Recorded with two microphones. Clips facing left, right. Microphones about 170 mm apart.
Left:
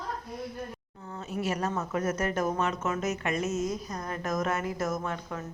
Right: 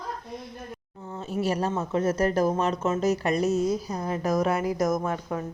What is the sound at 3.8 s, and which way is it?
Speech, 10° right (ahead or behind).